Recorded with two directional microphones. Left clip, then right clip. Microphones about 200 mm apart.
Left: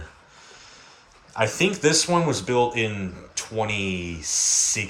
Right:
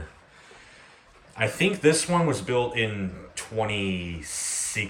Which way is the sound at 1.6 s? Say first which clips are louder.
Right 1 dB; 5° left (ahead or behind).